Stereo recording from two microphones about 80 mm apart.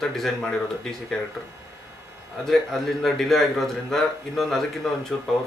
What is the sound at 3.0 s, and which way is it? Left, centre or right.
Speech, centre.